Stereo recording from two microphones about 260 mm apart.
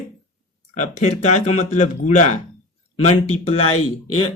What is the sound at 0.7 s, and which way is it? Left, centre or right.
Speech, left.